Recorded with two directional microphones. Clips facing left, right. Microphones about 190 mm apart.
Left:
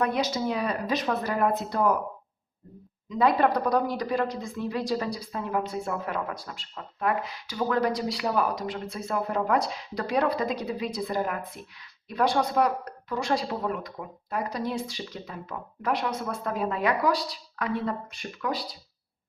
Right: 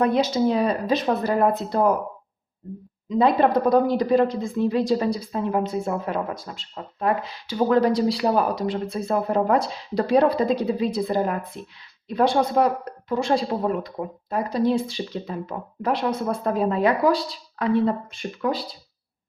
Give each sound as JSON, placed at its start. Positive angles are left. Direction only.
{"t": 0.0, "sound": "speech", "side_deg": -30}
{"t": 3.1, "sound": "speech", "side_deg": -25}